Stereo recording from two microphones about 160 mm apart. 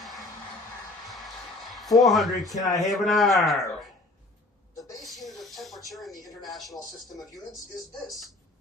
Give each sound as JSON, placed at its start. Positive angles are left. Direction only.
{"t": 1.0, "sound": "music", "side_deg": 0}
{"t": 1.7, "sound": "speech", "side_deg": 0}
{"t": 2.6, "sound": "speech", "side_deg": 20}
{"t": 2.8, "sound": "a man's voice", "side_deg": 0}
{"t": 5.0, "sound": "a sound", "side_deg": 0}